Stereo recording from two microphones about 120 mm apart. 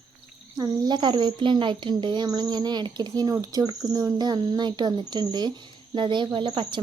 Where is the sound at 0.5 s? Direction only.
35° right (ahead or behind).